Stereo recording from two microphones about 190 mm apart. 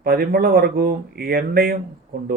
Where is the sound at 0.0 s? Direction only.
50° right (ahead or behind).